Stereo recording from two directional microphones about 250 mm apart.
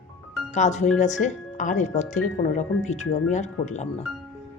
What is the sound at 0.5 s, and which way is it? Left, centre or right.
Speech, left.